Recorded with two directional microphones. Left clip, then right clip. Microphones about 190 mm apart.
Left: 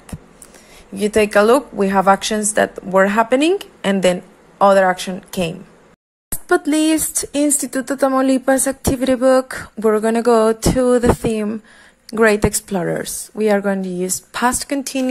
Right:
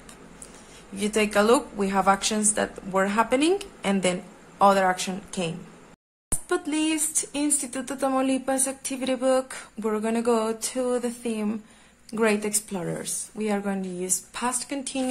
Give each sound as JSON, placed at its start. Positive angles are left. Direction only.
{"t": 0.9, "sound": "speech", "side_deg": 30}
{"t": 6.5, "sound": "speech", "side_deg": 35}